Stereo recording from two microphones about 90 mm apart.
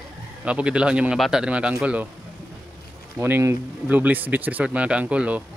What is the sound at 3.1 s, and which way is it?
Speech, 25° right (ahead or behind).